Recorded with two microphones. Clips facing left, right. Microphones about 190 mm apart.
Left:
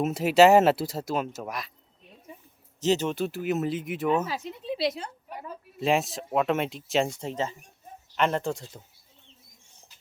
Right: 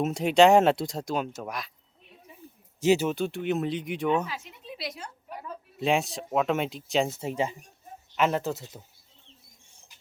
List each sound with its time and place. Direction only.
0.0 s speech: 5° left (ahead or behind)
2.8 s speech: 10° right (ahead or behind)
3.2 s speech: centre (ahead or behind)
4.3 s a woman's voice: 35° left (ahead or behind)
5.8 s speech: centre (ahead or behind)